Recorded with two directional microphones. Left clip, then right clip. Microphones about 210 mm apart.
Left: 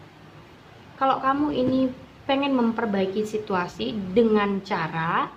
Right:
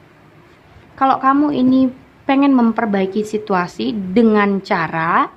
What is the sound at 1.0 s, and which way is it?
A woman's voice, 55° right (ahead or behind).